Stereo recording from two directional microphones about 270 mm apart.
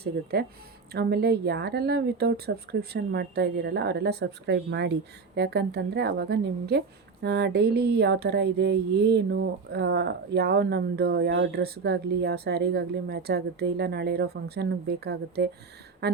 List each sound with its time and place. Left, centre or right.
0.0 s a woman's voice: right